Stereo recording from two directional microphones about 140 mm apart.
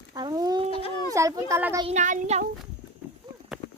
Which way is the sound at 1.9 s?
60° right (ahead or behind).